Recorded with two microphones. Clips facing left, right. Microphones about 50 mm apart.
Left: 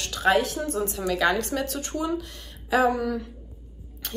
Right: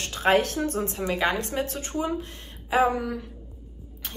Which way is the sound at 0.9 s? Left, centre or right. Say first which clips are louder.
Left 4 dB; right.